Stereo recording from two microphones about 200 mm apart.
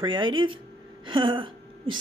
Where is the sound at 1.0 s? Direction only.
25° right (ahead or behind).